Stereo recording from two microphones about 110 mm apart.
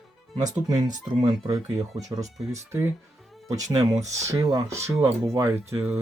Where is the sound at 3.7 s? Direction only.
35° right (ahead or behind).